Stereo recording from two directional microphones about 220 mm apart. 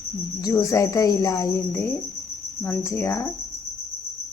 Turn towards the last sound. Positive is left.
turn(degrees=10)  # may be behind; listen again after turning